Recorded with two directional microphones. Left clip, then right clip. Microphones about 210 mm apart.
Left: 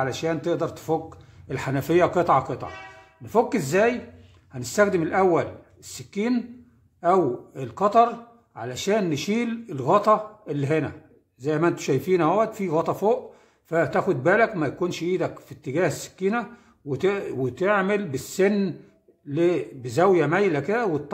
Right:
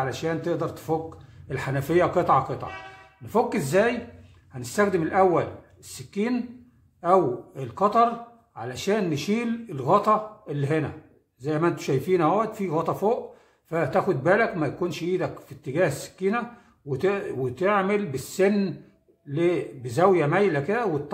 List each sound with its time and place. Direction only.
0.0 s a man's voice: 35° left (ahead or behind)